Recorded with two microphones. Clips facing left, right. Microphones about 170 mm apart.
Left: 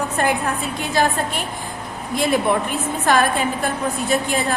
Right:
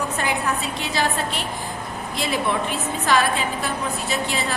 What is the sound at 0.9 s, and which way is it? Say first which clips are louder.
A woman's voice: left 4 dB; 50° left (ahead or behind).